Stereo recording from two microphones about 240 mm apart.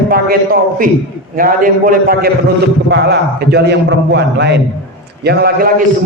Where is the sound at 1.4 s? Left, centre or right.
Right.